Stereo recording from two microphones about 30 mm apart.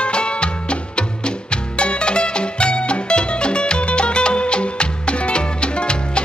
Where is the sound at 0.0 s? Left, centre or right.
Left.